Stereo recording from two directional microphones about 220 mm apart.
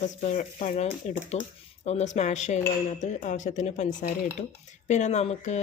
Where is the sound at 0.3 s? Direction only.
30° left (ahead or behind).